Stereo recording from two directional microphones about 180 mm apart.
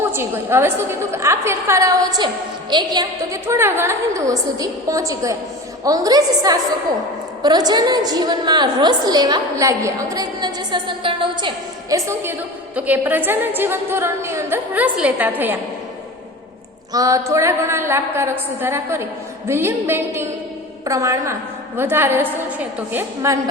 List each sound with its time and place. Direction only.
0.0 s a woman's voice: 15° right (ahead or behind)
16.9 s a woman's voice: 20° right (ahead or behind)